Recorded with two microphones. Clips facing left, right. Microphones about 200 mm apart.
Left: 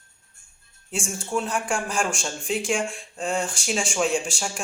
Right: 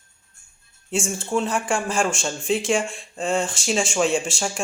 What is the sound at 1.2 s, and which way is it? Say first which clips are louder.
Speech: right 1 dB; centre (ahead or behind).